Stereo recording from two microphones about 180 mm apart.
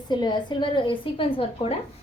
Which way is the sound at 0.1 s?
25° left (ahead or behind).